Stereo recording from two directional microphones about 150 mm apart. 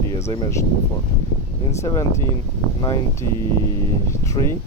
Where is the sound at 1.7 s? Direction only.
20° left (ahead or behind).